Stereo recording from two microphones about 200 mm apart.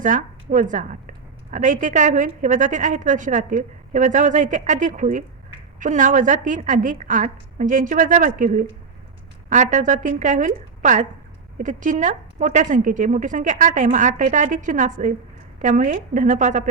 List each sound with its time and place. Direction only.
0.0 s a woman's voice: 40° right (ahead or behind)